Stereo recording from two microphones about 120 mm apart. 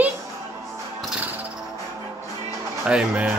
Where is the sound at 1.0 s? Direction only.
5° right (ahead or behind).